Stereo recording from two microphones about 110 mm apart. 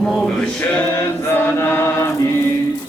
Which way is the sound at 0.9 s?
20° left (ahead or behind).